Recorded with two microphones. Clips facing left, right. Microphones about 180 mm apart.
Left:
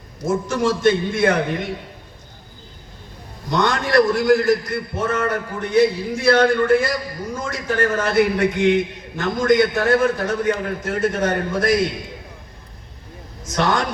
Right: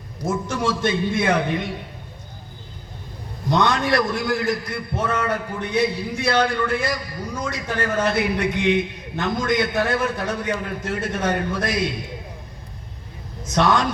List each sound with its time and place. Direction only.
0.4 s a man's voice: 55° left (ahead or behind)
3.5 s a man's voice: 55° left (ahead or behind)
13.6 s a man's voice: 60° left (ahead or behind)